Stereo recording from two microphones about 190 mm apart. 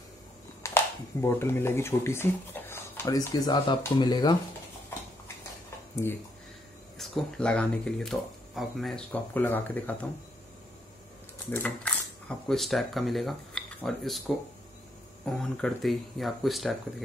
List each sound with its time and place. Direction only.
0.6 s a sound: 15° left (ahead or behind)
1.2 s speech: 15° left (ahead or behind)
6.0 s speech: 10° left (ahead or behind)
11.5 s speech: 5° left (ahead or behind)